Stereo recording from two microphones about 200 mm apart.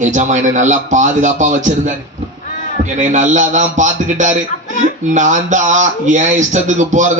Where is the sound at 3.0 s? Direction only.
40° right (ahead or behind).